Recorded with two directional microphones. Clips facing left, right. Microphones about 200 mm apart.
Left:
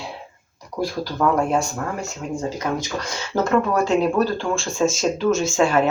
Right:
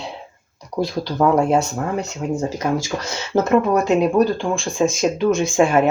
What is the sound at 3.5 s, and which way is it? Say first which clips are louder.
Speech: right 2 dB; 20° right (ahead or behind).